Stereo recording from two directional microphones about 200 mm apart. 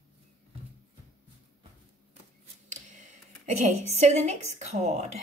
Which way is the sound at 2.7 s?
35° right (ahead or behind).